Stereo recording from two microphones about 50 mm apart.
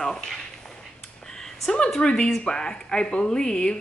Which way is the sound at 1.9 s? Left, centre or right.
Centre.